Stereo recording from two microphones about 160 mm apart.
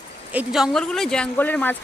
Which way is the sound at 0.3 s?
5° right (ahead or behind).